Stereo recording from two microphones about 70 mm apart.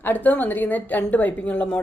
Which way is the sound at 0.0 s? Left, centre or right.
Left.